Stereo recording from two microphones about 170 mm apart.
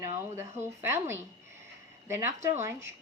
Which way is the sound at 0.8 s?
15° right (ahead or behind).